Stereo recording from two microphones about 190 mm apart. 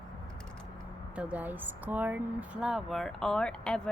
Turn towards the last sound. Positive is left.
turn(degrees=5)  # may be behind; listen again after turning